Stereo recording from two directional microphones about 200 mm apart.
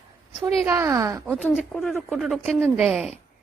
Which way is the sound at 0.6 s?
15° right (ahead or behind).